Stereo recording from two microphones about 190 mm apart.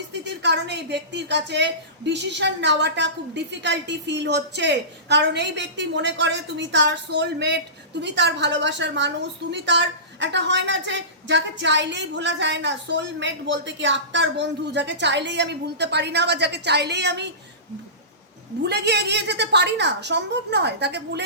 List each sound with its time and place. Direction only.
0.1 s a woman's voice: 65° right (ahead or behind)
18.6 s a woman's voice: 60° right (ahead or behind)